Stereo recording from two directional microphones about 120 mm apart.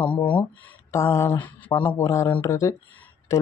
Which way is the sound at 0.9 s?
25° left (ahead or behind).